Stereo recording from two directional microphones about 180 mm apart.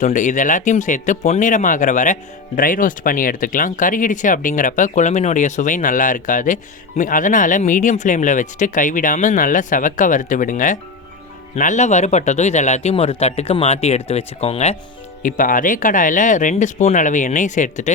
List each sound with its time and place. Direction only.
0.0 s speech: 45° left (ahead or behind)
15.2 s speech: 45° left (ahead or behind)